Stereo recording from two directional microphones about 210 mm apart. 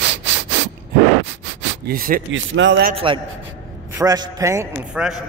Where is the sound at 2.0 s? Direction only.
40° right (ahead or behind).